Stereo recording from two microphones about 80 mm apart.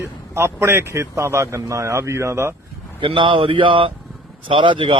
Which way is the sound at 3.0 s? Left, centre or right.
Right.